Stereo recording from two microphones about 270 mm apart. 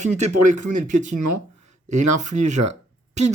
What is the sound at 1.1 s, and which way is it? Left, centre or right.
Speech, right.